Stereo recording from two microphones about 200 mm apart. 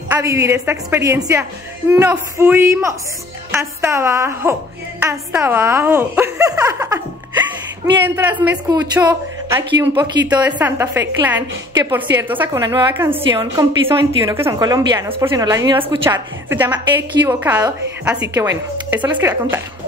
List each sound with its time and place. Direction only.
0.1 s a woman's voice: 15° right (ahead or behind)
16.0 s a woman's voice: 10° right (ahead or behind)